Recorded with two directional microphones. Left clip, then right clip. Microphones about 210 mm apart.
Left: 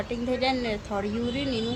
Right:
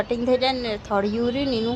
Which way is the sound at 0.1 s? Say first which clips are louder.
Right 4 dB; 20° right (ahead or behind).